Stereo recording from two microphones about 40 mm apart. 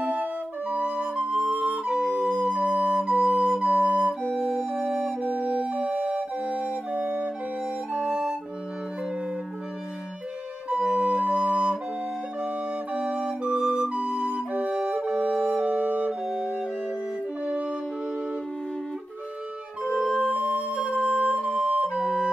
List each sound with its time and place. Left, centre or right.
0.7 s music: right
1.7 s flute: right
4.4 s music: centre
5.2 s music: right
7.0 s flute: right
10.7 s flute: right
15.8 s music: right
16.1 s music: centre
20.0 s music: centre
20.3 s music: right
21.0 s music: right
21.9 s flute: right